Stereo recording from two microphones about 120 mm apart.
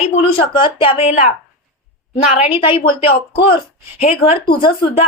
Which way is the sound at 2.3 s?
50° left (ahead or behind).